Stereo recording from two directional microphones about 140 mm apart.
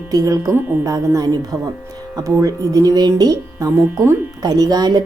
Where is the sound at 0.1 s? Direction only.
25° right (ahead or behind).